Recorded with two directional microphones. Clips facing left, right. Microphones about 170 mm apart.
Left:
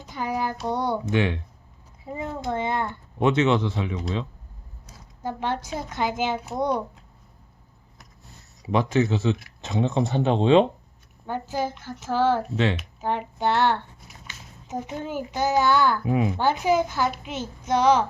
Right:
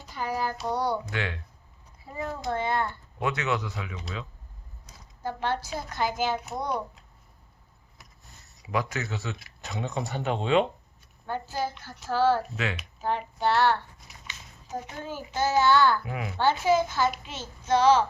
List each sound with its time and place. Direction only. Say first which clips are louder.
0.0 s child singing: left 3 dB; 20° left (ahead or behind)
0.7 s speech: left 5 dB; 20° left (ahead or behind)
8.6 s a child's voice: left 8 dB; 25° left (ahead or behind)